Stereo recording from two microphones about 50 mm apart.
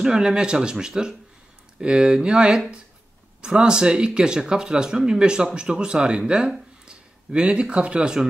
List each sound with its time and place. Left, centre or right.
0.0 s speech: centre